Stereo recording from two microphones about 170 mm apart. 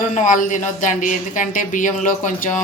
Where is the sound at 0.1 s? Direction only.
50° left (ahead or behind).